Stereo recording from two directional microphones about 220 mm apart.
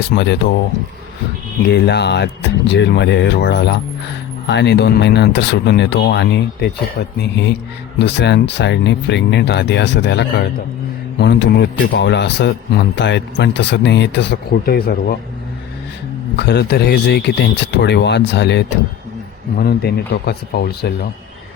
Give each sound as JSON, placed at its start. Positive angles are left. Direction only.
{"t": 0.0, "sound": "a man's voice", "side_deg": 50}
{"t": 1.7, "sound": "a man's voice", "side_deg": 50}
{"t": 16.4, "sound": "a man's voice", "side_deg": 50}